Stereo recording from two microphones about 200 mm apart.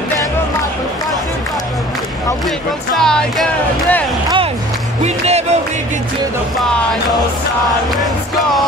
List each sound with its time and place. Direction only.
3.0 s music: centre (ahead or behind)
5.0 s music: 35° right (ahead or behind)